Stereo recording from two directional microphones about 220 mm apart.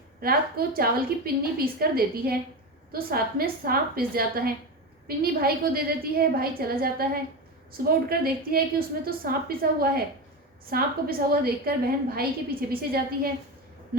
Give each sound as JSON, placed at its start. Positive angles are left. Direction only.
{"t": 0.2, "sound": "a woman's voice", "side_deg": -40}